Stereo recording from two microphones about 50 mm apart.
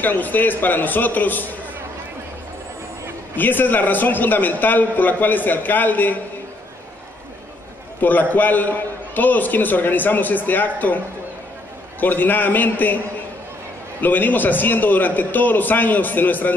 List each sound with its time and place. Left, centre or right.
0.0 s a man's voice: left
3.3 s a man's voice: left
8.0 s a man's voice: left
12.0 s a man's voice: left
14.0 s a man's voice: left